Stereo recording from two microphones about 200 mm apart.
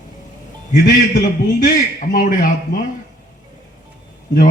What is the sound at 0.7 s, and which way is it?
A man's voice, 45° left (ahead or behind).